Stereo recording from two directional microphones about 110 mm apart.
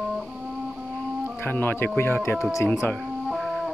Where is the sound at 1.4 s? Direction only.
20° left (ahead or behind).